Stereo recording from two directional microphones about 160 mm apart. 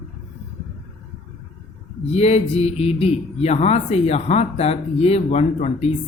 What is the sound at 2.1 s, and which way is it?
Speech, 40° left (ahead or behind).